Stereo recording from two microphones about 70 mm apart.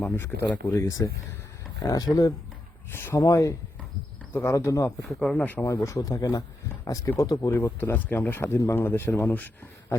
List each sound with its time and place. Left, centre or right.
0.2 s speech: left
0.7 s speech: left
2.9 s speech: left
3.2 s speech: left
4.3 s speech: left
4.5 s speech: left
5.0 s speech: centre
5.4 s speech: left
5.7 s speech: left
6.0 s speech: left
7.8 s speech: left